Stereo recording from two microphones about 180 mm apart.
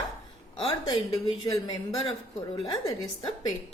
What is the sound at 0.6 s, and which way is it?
A woman's voice, 30° left (ahead or behind).